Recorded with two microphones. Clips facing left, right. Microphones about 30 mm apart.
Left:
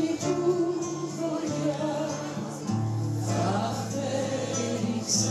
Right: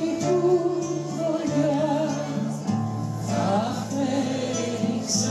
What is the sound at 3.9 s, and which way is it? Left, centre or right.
Music, right.